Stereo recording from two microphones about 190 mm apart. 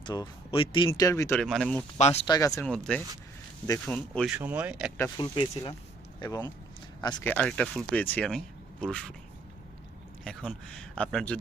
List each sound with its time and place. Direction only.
0.0 s speech: 25° left (ahead or behind)
0.9 s speech: 15° left (ahead or behind)
1.4 s speech: centre (ahead or behind)
2.0 s speech: 35° left (ahead or behind)
2.3 s speech: 15° left (ahead or behind)
2.6 s speech: 5° left (ahead or behind)
4.3 s speech: 10° right (ahead or behind)
4.9 s speech: 15° left (ahead or behind)
5.3 s speech: 25° left (ahead or behind)
7.3 s speech: 5° left (ahead or behind)
10.2 s speech: 5° left (ahead or behind)